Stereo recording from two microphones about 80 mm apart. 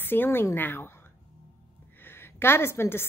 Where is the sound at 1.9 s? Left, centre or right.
Left.